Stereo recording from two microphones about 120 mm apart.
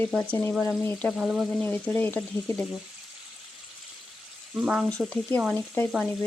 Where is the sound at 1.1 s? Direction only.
5° right (ahead or behind).